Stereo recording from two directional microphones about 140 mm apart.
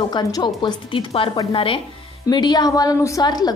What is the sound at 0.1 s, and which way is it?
A woman's voice, 30° left (ahead or behind).